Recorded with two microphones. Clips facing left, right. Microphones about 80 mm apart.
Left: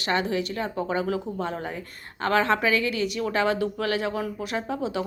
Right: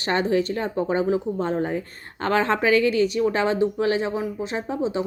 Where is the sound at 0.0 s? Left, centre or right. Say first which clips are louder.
Right 4 dB; right.